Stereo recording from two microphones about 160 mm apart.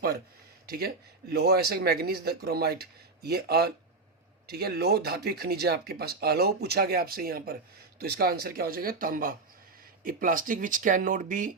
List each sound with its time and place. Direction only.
0.7 s speech: 75° right (ahead or behind); by 11.5 s 55° right (ahead or behind)